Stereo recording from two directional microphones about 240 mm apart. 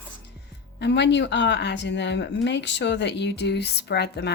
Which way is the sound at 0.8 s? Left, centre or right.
Left.